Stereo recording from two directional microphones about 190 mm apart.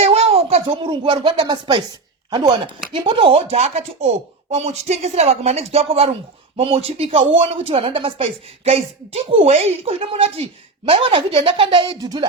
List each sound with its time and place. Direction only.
0.0 s speech: 30° right (ahead or behind)